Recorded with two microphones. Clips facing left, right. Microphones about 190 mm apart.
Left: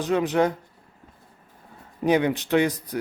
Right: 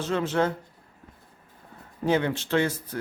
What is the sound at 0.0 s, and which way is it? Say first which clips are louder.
Speech: left 4 dB; 15° left (ahead or behind).